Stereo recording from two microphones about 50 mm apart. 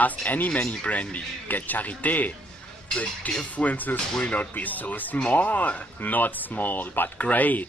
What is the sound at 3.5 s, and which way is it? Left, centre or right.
Speech, left.